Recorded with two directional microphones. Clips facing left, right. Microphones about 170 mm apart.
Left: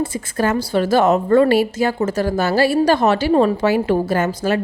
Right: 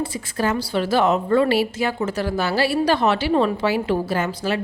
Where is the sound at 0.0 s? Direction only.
50° left (ahead or behind).